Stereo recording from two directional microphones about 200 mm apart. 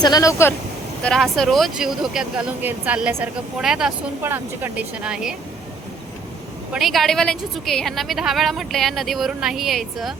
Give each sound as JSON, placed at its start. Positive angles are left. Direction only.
{"t": 0.0, "sound": "speech", "side_deg": 20}
{"t": 1.0, "sound": "speech", "side_deg": 0}
{"t": 6.7, "sound": "speech", "side_deg": 0}